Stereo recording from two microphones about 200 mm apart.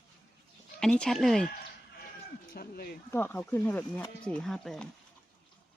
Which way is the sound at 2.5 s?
45° left (ahead or behind).